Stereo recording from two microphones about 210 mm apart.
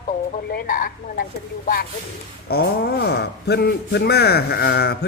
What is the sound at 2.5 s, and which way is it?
A woman's voice, 45° left (ahead or behind).